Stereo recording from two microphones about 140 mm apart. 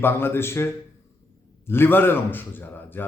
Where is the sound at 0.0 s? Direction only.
15° left (ahead or behind).